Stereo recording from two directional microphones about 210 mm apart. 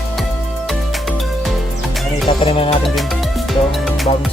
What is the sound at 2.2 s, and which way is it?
Music, 25° left (ahead or behind).